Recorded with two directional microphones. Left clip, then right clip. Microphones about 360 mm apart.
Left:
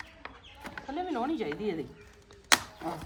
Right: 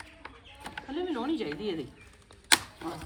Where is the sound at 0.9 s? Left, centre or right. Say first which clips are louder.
Even; centre.